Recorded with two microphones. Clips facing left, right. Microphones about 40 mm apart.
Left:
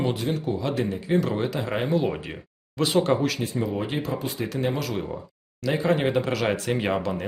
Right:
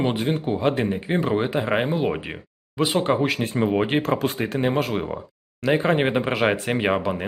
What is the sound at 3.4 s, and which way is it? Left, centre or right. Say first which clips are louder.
Speech: right 6 dB; right.